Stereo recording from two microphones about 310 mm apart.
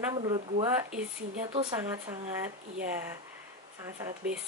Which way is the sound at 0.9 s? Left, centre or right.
Centre.